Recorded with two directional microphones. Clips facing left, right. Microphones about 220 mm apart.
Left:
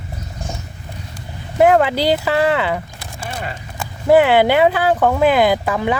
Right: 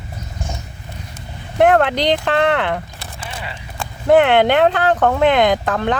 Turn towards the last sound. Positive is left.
turn(degrees=10)  # may be behind; listen again after turning